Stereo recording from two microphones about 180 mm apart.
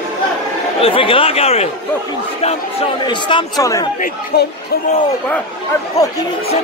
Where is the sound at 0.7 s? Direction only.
30° left (ahead or behind).